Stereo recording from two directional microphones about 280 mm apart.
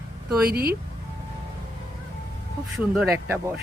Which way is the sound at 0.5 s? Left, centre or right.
Right.